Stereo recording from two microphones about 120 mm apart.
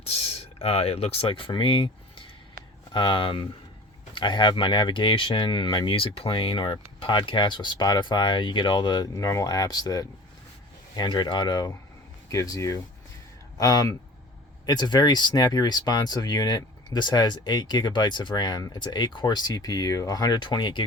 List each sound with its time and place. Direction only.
0.1 s speech: 60° left (ahead or behind); by 20.8 s 40° left (ahead or behind)